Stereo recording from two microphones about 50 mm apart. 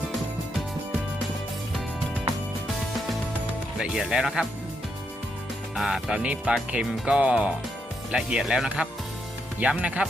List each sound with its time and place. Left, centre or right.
3.9 s speech: centre
5.7 s speech: centre; by 10.0 s right